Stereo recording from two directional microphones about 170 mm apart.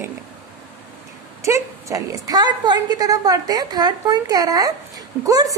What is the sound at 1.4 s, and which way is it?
A woman's voice, 15° right (ahead or behind).